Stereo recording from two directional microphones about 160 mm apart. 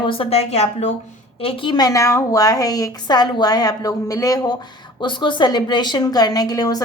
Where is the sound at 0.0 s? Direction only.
35° left (ahead or behind).